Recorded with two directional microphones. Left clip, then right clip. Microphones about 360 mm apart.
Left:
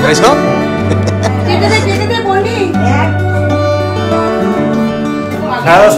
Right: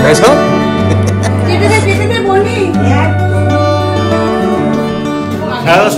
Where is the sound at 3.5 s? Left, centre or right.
Centre.